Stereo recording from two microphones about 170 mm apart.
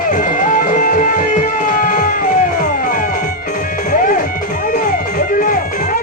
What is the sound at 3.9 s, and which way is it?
Music, 55° left (ahead or behind).